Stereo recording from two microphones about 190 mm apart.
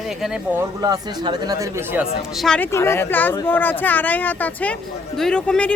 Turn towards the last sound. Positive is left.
turn(degrees=5)  # may be behind; listen again after turning